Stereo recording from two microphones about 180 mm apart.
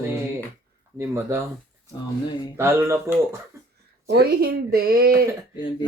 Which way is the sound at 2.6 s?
15° right (ahead or behind).